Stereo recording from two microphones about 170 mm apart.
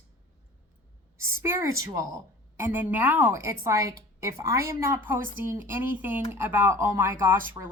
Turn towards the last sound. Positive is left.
turn(degrees=-15)  # may be behind; listen again after turning